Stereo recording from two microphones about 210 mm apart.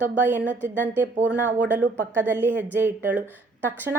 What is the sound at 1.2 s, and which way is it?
A woman's voice, 10° right (ahead or behind).